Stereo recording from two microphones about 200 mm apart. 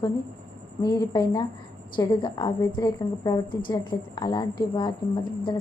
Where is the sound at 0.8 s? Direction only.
20° left (ahead or behind).